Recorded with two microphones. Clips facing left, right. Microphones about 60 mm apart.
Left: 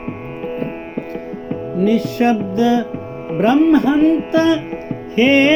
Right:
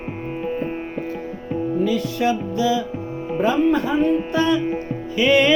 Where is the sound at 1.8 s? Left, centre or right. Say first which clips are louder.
Left 8 dB; left.